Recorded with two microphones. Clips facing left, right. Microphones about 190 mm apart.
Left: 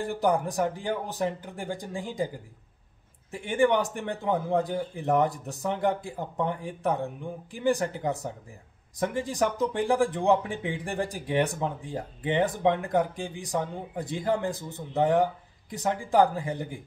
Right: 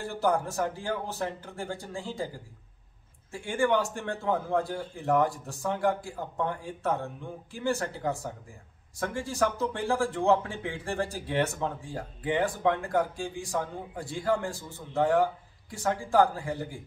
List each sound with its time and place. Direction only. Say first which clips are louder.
0.0 s speech: left 2 dB; 15° left (ahead or behind)